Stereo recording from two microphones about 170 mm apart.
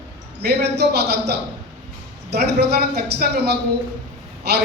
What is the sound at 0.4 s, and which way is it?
A man's voice, 75° right (ahead or behind).